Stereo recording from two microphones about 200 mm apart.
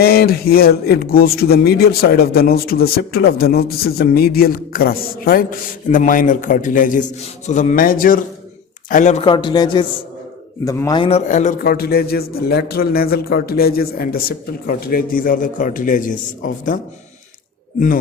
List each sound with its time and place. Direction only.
0.0 s a man's voice: 50° left (ahead or behind); by 11.2 s 25° left (ahead or behind)
11.3 s a man's voice: 35° left (ahead or behind)